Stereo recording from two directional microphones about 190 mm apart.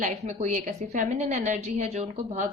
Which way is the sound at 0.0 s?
35° right (ahead or behind).